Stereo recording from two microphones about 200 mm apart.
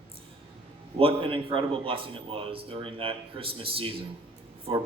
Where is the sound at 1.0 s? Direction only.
25° right (ahead or behind).